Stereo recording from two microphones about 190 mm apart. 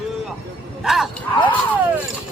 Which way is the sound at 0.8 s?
Centre (ahead or behind).